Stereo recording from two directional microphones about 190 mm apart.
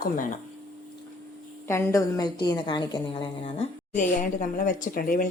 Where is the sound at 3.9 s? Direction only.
45° left (ahead or behind).